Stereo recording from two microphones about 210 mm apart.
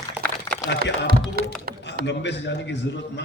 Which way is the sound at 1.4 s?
45° right (ahead or behind).